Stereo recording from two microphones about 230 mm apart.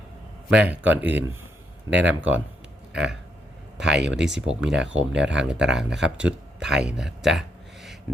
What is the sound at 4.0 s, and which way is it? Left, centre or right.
Speech, right.